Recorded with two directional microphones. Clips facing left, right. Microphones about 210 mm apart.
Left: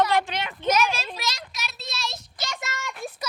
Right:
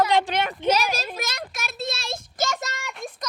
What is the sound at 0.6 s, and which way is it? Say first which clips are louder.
Speech: left 1 dB; 35° right (ahead or behind).